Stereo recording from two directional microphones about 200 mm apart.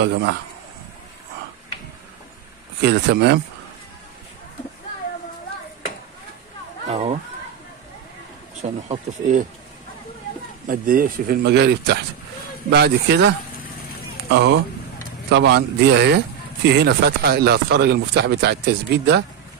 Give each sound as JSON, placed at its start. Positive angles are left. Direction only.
{"t": 0.0, "sound": "speech", "side_deg": -60}
{"t": 2.8, "sound": "speech", "side_deg": -60}
{"t": 6.9, "sound": "speech", "side_deg": -35}
{"t": 8.6, "sound": "speech", "side_deg": -30}
{"t": 10.7, "sound": "speech", "side_deg": -45}
{"t": 14.3, "sound": "speech", "side_deg": -60}